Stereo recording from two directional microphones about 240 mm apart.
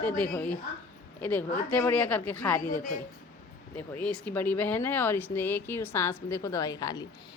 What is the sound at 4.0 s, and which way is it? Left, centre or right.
A woman's voice, centre.